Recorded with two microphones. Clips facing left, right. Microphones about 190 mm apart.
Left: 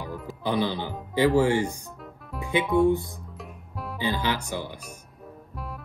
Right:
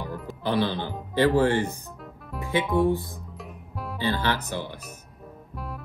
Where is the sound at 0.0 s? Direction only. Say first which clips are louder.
Right 1 dB; 5° left (ahead or behind).